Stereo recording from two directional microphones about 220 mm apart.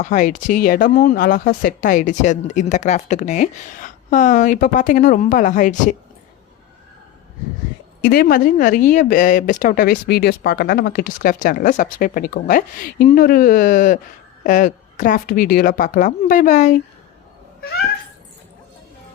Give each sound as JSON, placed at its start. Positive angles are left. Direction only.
{"t": 0.0, "sound": "speech", "side_deg": 35}
{"t": 8.0, "sound": "speech", "side_deg": 40}